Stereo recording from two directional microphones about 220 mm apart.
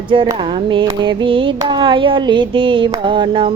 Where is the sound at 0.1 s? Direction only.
20° right (ahead or behind).